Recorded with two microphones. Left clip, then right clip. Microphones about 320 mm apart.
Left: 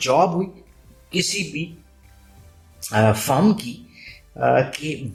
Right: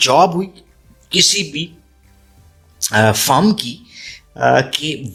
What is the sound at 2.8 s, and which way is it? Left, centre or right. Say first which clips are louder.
Speech: right 5 dB; right.